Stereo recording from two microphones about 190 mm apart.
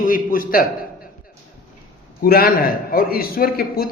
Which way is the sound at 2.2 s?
50° left (ahead or behind).